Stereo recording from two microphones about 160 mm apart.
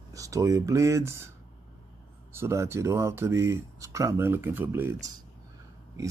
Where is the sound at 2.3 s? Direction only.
15° right (ahead or behind).